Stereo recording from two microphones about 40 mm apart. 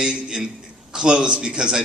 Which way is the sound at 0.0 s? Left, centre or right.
Centre.